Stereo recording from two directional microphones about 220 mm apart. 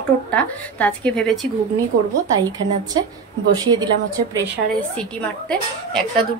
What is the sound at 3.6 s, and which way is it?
Speech, 20° right (ahead or behind).